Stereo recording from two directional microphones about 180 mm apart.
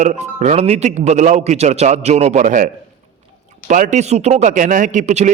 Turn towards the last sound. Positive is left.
turn(degrees=-40)  # may be behind; listen again after turning